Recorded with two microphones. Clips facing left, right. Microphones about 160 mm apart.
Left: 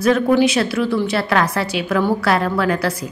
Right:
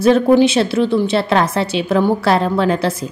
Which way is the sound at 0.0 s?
25° right (ahead or behind).